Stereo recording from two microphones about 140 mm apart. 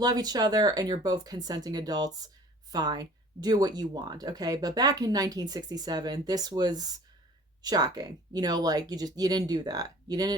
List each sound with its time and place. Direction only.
0.0 s speech: 30° right (ahead or behind)